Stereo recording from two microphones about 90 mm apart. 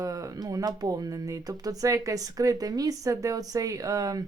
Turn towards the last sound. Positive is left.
turn(degrees=-40)  # may be behind; listen again after turning